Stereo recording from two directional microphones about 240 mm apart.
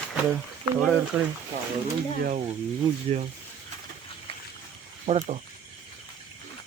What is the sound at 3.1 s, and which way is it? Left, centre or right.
Cricket, right.